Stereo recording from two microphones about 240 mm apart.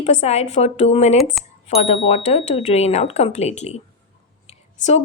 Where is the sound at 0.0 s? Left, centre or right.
Left.